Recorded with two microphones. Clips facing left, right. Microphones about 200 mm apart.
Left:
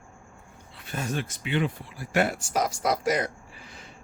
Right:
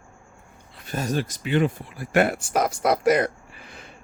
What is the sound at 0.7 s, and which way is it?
Speech, 40° right (ahead or behind).